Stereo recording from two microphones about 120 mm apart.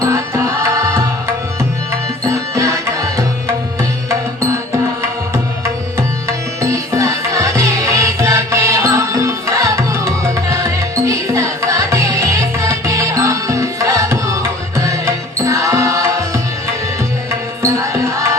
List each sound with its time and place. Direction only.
0.0 s music: 25° right (ahead or behind)
2.2 s music: 25° right (ahead or behind)
17.6 s music: 25° right (ahead or behind)